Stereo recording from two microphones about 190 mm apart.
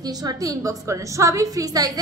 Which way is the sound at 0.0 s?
20° right (ahead or behind).